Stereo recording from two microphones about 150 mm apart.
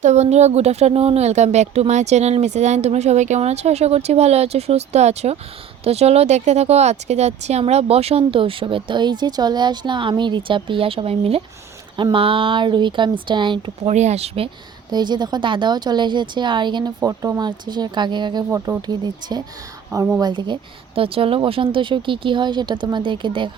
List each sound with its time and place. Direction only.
0.0 s speech: 50° right (ahead or behind); by 13.9 s 35° right (ahead or behind)
13.9 s speech: 50° right (ahead or behind)
14.9 s speech: 30° right (ahead or behind)